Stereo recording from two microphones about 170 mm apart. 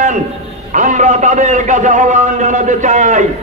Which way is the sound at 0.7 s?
45° right (ahead or behind).